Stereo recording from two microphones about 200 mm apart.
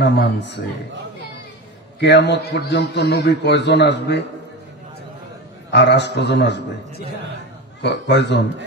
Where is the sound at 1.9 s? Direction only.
55° left (ahead or behind).